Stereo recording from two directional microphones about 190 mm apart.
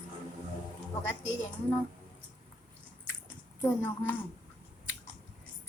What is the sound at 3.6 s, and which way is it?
Speech, 10° left (ahead or behind).